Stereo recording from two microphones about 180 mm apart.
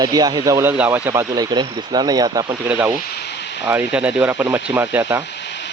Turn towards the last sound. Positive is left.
turn(degrees=-10)  # may be behind; listen again after turning